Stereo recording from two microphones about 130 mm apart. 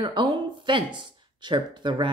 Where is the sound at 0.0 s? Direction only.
35° right (ahead or behind).